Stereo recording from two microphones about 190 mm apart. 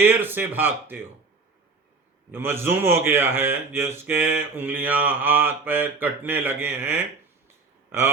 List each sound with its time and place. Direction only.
0.0 s speech: 10° right (ahead or behind)
2.3 s speech: 10° right (ahead or behind)